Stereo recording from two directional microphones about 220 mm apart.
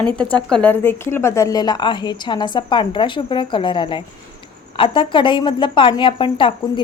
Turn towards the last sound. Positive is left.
turn(degrees=20)  # may be behind; listen again after turning